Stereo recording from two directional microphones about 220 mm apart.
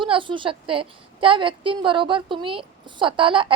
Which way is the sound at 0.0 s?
20° right (ahead or behind).